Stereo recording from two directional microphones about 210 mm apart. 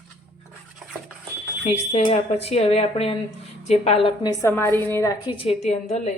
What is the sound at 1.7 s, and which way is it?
A woman's voice, 30° left (ahead or behind).